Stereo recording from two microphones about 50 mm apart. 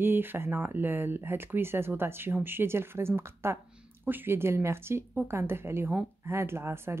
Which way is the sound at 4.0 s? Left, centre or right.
Right.